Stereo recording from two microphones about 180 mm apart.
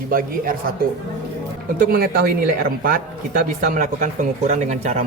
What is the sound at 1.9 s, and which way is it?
Speech, 55° right (ahead or behind).